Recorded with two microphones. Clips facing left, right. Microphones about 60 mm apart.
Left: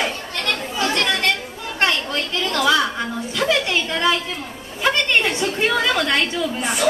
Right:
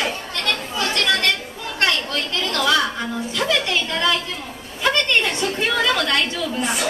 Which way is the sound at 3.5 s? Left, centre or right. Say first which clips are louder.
Left 1 dB; centre.